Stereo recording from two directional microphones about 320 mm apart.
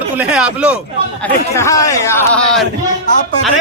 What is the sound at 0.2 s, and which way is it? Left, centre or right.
Speech, centre.